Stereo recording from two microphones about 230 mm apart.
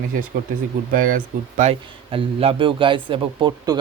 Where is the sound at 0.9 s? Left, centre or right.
Right.